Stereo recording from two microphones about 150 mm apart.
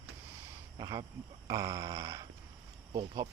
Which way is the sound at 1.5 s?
20° right (ahead or behind).